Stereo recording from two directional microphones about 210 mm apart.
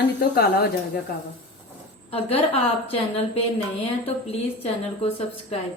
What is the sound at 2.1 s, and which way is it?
A woman's voice, 30° left (ahead or behind).